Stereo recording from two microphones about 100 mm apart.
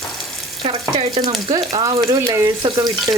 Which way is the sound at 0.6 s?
90° right.